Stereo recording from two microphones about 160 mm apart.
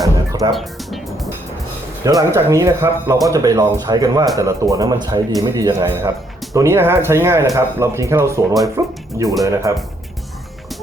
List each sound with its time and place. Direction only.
0.3 s speech: 20° right (ahead or behind)
0.5 s speech: centre (ahead or behind)
2.0 s speech: 20° right (ahead or behind)